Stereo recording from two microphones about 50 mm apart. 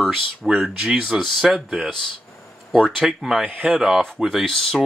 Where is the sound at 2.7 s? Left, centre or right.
Centre.